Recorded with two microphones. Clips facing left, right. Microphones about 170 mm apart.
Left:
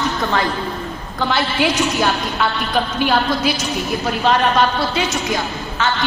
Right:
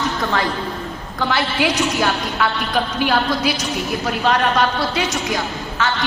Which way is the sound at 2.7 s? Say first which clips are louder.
Left 2 dB; 20° left (ahead or behind).